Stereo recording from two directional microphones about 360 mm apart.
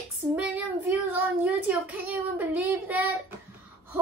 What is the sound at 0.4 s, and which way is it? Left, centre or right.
Child singing, centre.